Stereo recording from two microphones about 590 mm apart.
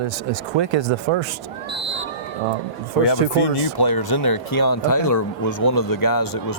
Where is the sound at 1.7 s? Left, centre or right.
Centre.